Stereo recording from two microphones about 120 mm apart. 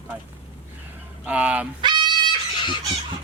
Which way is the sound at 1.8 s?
40° right (ahead or behind).